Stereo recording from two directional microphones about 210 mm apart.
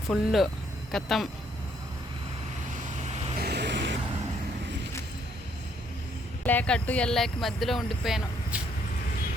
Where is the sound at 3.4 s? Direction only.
50° right (ahead or behind).